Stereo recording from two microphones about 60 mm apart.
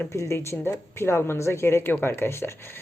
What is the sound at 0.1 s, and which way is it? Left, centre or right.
Speech, left.